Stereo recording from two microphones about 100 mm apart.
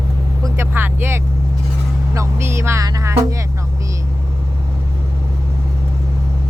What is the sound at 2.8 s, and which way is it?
Music, 30° right (ahead or behind).